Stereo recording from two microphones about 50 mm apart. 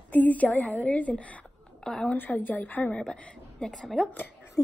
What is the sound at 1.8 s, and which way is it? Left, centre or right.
Speech, centre.